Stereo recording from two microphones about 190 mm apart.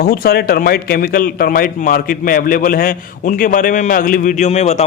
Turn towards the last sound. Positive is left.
turn(degrees=35)  # may be behind; listen again after turning